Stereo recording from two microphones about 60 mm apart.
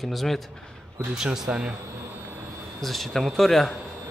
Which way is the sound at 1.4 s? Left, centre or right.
Centre.